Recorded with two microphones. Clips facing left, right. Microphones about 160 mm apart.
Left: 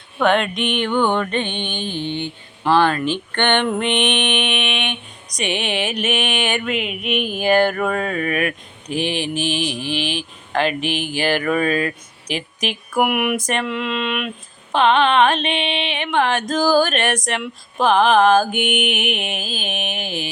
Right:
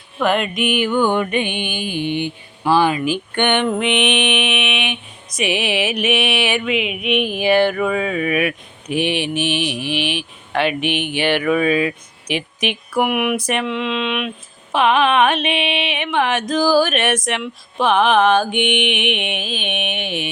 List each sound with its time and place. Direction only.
0.2 s music: centre (ahead or behind)
5.4 s mantra: 5° right (ahead or behind)
8.9 s a sound: 35° left (ahead or behind)
9.1 s mantra: 5° right (ahead or behind)
10.2 s speech: 5° right (ahead or behind)
10.8 s a sound: 35° left (ahead or behind)
11.3 s mantra: 5° right (ahead or behind)
13.0 s mantra: 5° left (ahead or behind)
18.9 s a sound: 40° left (ahead or behind)